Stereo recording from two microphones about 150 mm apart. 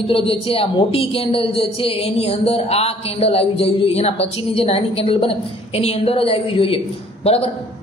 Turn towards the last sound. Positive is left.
turn(degrees=40)  # may be behind; listen again after turning